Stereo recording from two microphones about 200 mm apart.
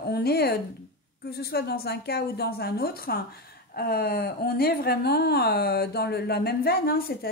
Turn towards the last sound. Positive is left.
turn(degrees=50)  # may be behind; listen again after turning